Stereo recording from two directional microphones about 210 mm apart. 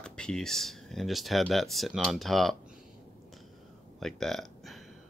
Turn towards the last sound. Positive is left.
turn(degrees=0)  # may be behind; listen again after turning